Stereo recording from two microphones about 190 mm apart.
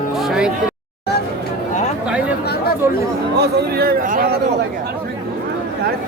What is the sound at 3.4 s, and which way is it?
Speech, 55° right (ahead or behind).